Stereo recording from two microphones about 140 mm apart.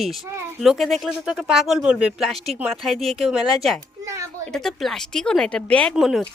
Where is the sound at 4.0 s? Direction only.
20° right (ahead or behind).